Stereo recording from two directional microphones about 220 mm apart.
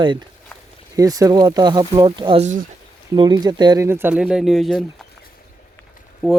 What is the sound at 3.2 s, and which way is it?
Speech, 20° right (ahead or behind).